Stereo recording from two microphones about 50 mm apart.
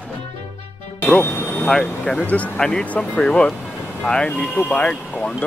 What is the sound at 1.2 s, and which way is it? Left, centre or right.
Speech, left.